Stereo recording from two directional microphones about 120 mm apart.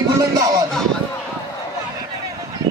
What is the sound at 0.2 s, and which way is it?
Music, 30° right (ahead or behind).